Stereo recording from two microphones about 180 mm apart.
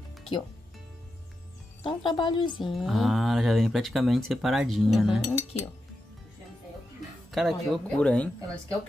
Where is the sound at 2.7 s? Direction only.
Centre (ahead or behind).